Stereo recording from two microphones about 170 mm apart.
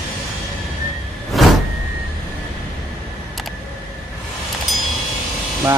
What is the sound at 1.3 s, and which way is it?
Vehicle, centre (ahead or behind).